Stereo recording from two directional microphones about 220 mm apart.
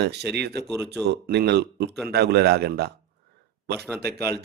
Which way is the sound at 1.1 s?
50° right (ahead or behind).